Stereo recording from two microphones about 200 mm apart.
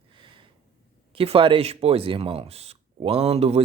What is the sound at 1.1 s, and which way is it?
Speech, 25° right (ahead or behind).